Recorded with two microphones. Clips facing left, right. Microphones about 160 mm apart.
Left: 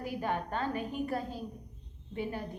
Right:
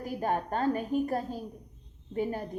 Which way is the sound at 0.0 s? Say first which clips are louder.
Right 3 dB; 45° right (ahead or behind).